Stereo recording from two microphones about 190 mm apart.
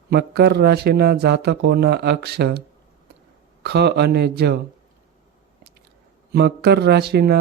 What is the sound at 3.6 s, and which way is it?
Speech, 60° right (ahead or behind).